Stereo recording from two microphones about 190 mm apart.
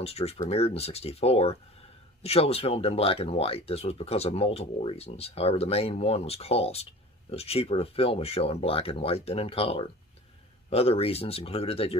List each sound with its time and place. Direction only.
0.0 s speech: 35° left (ahead or behind)